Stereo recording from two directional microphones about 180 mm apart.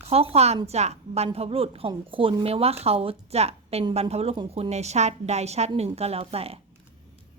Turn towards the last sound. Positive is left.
turn(degrees=-35)  # may be behind; listen again after turning